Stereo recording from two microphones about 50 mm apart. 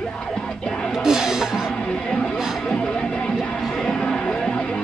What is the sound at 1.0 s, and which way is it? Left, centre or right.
Music, centre.